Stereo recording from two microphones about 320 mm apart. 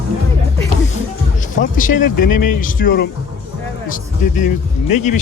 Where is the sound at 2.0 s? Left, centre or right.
Left.